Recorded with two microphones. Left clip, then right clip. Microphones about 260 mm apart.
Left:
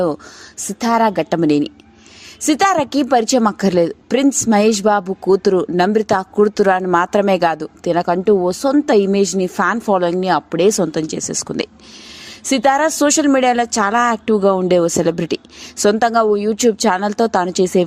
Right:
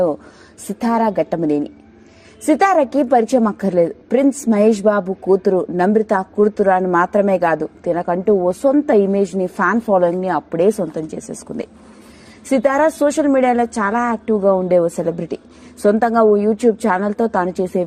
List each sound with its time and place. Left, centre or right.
0.8 s speech: left